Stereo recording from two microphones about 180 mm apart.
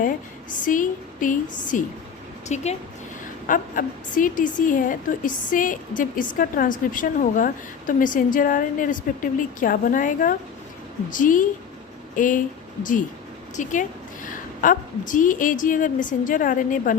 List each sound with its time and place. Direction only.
0.6 s a woman's voice: 45° left (ahead or behind)